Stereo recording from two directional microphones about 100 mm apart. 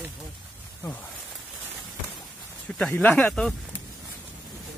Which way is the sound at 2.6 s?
10° left (ahead or behind).